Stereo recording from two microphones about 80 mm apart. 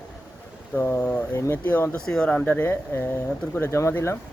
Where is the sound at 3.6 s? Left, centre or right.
Left.